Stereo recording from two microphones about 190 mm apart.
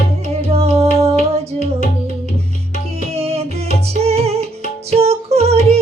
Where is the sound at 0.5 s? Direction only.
30° right (ahead or behind).